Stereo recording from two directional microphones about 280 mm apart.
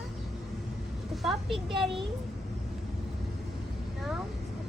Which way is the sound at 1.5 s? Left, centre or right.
Centre.